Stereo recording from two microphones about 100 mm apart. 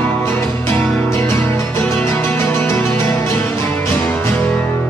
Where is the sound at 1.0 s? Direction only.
30° left (ahead or behind).